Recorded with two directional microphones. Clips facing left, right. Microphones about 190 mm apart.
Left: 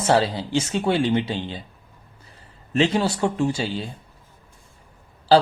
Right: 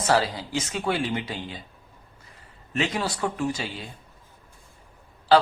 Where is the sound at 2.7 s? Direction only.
30° left (ahead or behind).